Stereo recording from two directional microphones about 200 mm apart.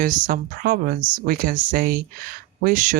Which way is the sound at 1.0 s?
20° right (ahead or behind).